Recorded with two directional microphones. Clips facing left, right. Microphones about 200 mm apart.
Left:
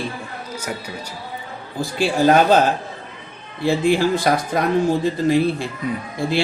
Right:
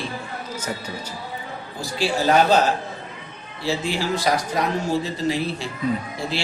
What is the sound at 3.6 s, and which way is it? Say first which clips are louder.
Speech: left 8 dB; 55° left (ahead or behind).